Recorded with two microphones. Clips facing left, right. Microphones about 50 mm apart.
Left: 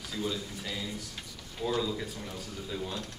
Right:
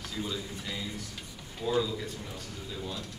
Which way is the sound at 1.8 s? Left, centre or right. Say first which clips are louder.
Left 1 dB; centre.